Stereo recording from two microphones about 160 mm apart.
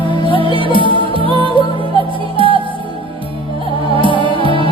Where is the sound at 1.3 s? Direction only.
30° right (ahead or behind).